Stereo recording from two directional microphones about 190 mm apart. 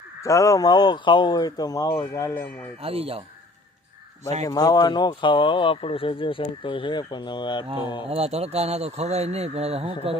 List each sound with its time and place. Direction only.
0.2 s speech: 15° left (ahead or behind)
2.8 s speech: 30° right (ahead or behind)
4.4 s speech: 20° left (ahead or behind)
8.1 s speech: 35° right (ahead or behind)